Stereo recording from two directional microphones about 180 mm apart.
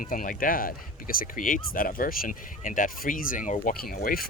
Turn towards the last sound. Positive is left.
turn(degrees=55)  # may be behind; listen again after turning